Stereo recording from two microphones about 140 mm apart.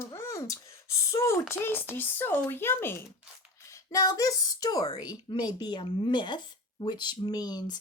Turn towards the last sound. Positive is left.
turn(degrees=30)  # may be behind; listen again after turning